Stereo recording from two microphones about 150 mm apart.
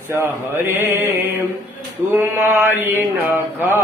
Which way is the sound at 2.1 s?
15° right (ahead or behind).